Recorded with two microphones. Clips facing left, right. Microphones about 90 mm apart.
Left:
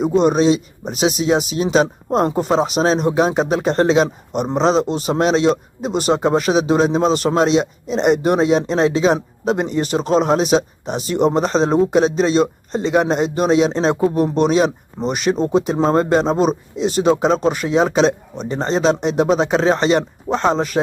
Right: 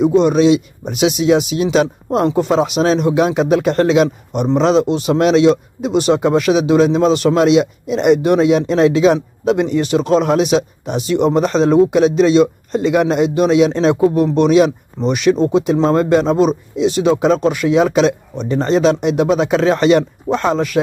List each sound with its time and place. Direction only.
0.2 s a man's voice: 35° left (ahead or behind)